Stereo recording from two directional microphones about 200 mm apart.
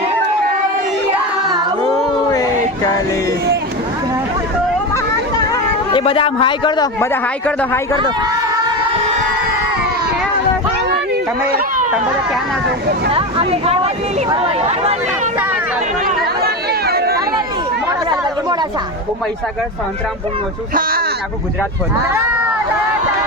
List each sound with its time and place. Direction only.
2.3 s a sound: 15° left (ahead or behind)
5.5 s a man's voice: 25° left (ahead or behind); by 7.8 s 10° left (ahead or behind)
7.9 s speech: 20° right (ahead or behind)
10.8 s a sound: 55° right (ahead or behind)
13.1 s speech: 30° right (ahead or behind)
16.4 s run: 50° right (ahead or behind)
22.0 s speech: 10° right (ahead or behind)